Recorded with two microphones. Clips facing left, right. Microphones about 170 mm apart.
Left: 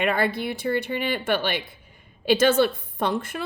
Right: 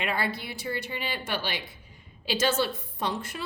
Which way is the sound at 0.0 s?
55° left (ahead or behind).